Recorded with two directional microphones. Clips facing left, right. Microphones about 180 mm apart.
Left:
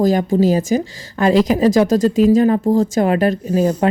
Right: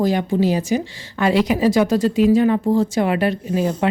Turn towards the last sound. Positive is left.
turn(degrees=40)  # may be behind; listen again after turning